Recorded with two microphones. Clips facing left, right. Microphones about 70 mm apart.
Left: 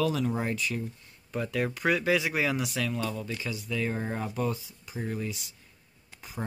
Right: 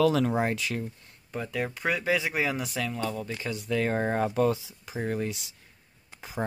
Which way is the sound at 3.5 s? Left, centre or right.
Right.